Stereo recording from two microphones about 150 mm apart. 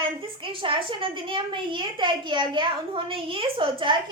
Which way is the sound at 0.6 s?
35° right (ahead or behind).